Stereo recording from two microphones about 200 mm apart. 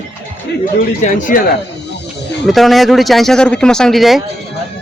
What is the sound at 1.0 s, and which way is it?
Speech, 40° left (ahead or behind).